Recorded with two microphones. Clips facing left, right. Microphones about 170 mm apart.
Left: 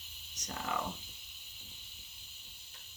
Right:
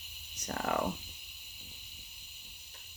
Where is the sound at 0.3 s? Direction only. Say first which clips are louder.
Right 5 dB; 60° right (ahead or behind).